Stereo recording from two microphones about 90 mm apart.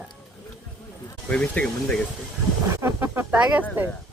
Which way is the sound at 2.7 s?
25° right (ahead or behind).